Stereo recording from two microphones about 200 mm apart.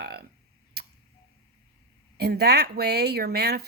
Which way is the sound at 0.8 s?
55° right (ahead or behind).